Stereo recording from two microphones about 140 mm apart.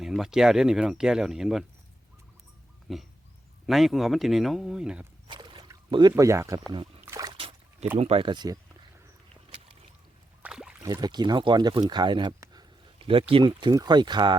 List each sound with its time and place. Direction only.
0.0 s speech: 5° right (ahead or behind)
2.9 s speech: centre (ahead or behind)
5.3 s rowboat: 35° right (ahead or behind)
7.0 s trickle: 25° right (ahead or behind)
7.3 s trickle: 40° right (ahead or behind)
7.9 s speech: 45° right (ahead or behind)
9.5 s boat: 45° right (ahead or behind)
10.4 s boat: 5° right (ahead or behind)
11.0 s speech: 30° right (ahead or behind)